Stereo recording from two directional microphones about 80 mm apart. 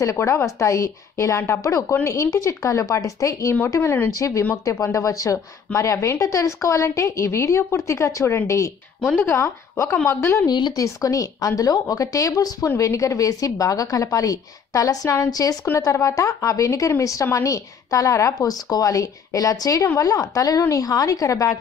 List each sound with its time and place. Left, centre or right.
0.0 s a woman's voice: left